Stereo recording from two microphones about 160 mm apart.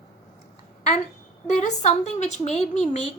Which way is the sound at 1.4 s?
50° left (ahead or behind).